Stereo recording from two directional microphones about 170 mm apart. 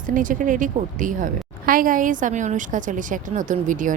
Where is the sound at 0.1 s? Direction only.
50° right (ahead or behind).